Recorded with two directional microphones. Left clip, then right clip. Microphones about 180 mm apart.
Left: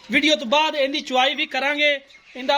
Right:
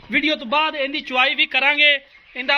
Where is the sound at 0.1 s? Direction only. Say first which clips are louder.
Left 1 dB; 25° left (ahead or behind).